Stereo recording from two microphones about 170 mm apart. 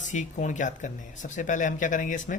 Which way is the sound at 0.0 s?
45° left (ahead or behind).